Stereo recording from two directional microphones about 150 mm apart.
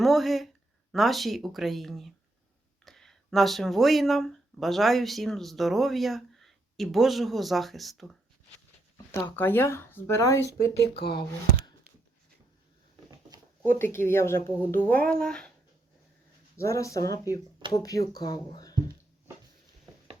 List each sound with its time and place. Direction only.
0.0 s speech: centre (ahead or behind)
9.1 s speech: 20° left (ahead or behind)
10.9 s speech: 90° left
13.1 s a sound: 25° right (ahead or behind)
13.7 s speech: 15° left (ahead or behind)
16.6 s speech: 20° left (ahead or behind)